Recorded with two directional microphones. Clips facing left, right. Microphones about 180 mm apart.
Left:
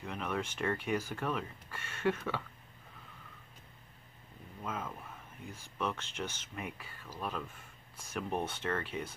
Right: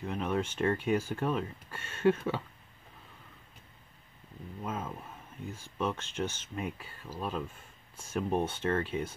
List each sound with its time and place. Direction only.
0.0 s speech: 30° right (ahead or behind)
4.6 s speech: 30° right (ahead or behind)